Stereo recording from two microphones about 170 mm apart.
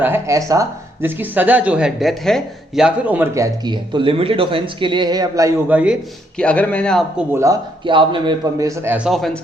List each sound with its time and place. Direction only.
0.0 s speech: 15° right (ahead or behind)
6.3 s a man's voice: 5° left (ahead or behind)
7.3 s a man's voice: 20° right (ahead or behind)
9.0 s speech: centre (ahead or behind)